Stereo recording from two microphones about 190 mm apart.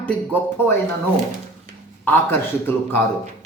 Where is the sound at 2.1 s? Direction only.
10° left (ahead or behind).